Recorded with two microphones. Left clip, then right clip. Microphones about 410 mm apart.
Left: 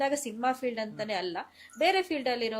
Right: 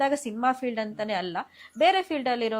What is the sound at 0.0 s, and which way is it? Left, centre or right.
A woman's voice, right.